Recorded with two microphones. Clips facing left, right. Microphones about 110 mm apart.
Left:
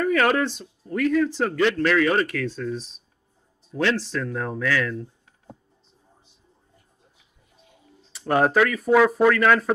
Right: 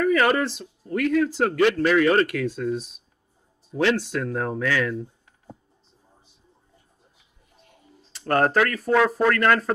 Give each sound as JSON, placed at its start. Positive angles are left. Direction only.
{"t": 0.0, "sound": "a man's voice", "side_deg": 0}
{"t": 7.5, "sound": "speech", "side_deg": 0}